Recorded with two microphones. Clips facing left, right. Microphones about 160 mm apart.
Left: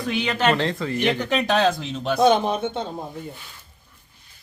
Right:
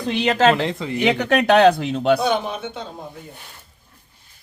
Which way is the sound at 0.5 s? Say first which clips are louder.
Right 1 dB; 15° right (ahead or behind).